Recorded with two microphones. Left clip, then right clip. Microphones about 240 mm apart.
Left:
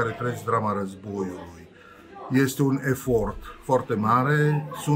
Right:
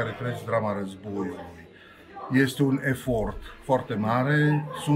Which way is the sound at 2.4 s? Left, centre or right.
Centre.